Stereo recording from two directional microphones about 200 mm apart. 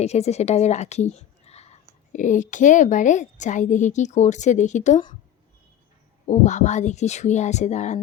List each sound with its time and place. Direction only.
0.0 s a woman's voice: 35° left (ahead or behind)
6.2 s a woman's voice: 35° left (ahead or behind)